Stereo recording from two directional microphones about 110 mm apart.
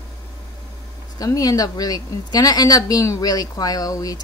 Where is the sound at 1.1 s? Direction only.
35° left (ahead or behind).